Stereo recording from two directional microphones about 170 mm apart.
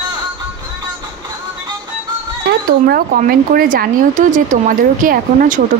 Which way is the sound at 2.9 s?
60° right (ahead or behind).